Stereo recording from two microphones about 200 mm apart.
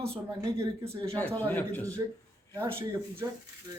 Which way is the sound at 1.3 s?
10° left (ahead or behind).